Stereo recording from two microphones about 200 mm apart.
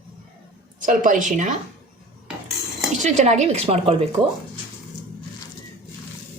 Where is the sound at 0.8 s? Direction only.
40° right (ahead or behind).